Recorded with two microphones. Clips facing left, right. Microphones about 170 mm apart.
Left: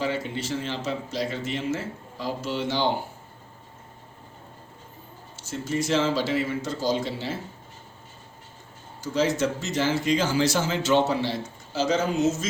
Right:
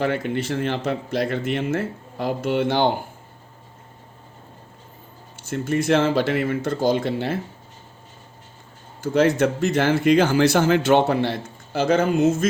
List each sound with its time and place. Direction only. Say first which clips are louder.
0.0 s speech: right 5 dB; 60° right (ahead or behind)
5.4 s speech: right 5 dB; 55° right (ahead or behind)
9.0 s speech: right 6 dB; 55° right (ahead or behind)